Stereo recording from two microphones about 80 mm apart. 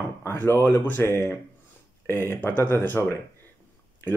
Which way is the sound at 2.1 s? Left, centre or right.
Left.